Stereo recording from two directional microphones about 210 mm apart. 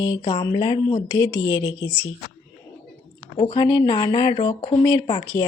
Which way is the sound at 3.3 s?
20° left (ahead or behind).